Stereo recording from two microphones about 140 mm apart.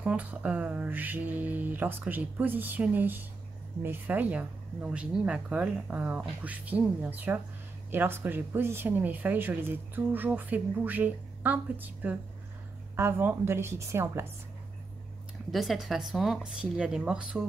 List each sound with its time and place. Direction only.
0.0 s speech: 10° right (ahead or behind)
15.5 s speech: centre (ahead or behind)